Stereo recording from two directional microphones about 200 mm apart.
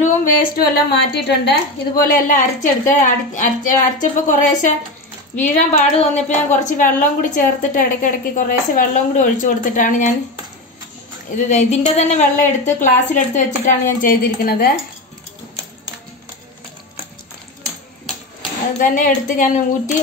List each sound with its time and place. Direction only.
0.0 s a woman's voice: 45° left (ahead or behind)
11.3 s a woman's voice: 35° left (ahead or behind)
18.8 s a woman's voice: 40° left (ahead or behind)